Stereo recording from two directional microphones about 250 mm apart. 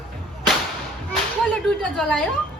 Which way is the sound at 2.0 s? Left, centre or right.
Centre.